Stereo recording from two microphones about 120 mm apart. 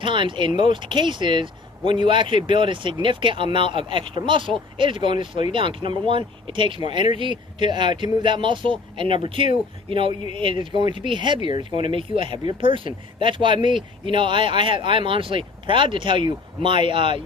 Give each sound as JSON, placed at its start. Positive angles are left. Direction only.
{"t": 0.0, "sound": "speech", "side_deg": -45}